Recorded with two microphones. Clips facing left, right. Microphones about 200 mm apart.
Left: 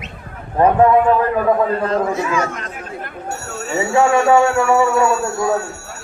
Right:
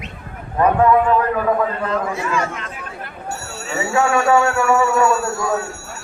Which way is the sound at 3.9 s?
25° left (ahead or behind).